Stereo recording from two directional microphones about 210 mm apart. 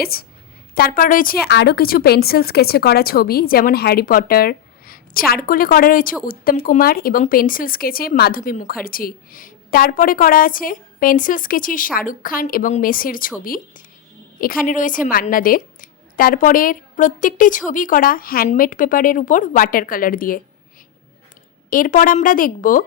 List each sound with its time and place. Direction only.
0.0 s a woman's voice: 45° left (ahead or behind)
21.7 s speech: 40° left (ahead or behind)